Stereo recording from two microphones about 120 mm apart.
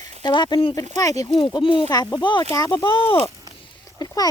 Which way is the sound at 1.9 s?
35° left (ahead or behind).